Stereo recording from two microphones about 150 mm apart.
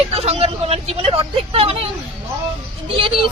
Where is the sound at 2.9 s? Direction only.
40° right (ahead or behind).